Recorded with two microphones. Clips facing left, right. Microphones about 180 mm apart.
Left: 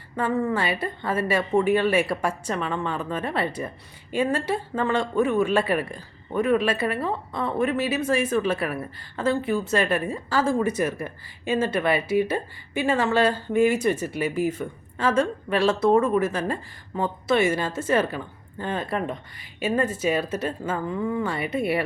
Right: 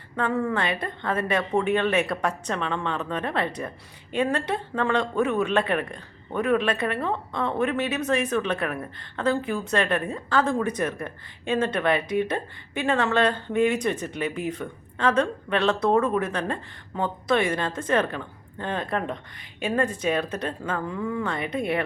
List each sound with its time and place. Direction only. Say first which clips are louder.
0.2 s speech: left 1 dB; 5° left (ahead or behind)